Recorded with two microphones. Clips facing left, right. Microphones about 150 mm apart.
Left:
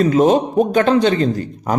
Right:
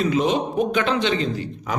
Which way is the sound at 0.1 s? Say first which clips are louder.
Left 7 dB; 45° left (ahead or behind).